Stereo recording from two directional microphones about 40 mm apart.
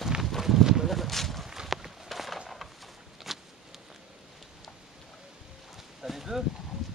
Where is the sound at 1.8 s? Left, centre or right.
Centre.